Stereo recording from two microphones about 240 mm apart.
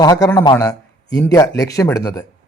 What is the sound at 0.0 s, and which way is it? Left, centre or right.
A man's voice, centre.